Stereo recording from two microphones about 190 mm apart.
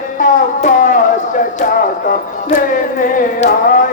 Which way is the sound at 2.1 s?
45° left (ahead or behind).